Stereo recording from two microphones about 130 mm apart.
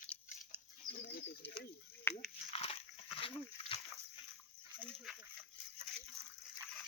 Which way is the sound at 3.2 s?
45° left (ahead or behind).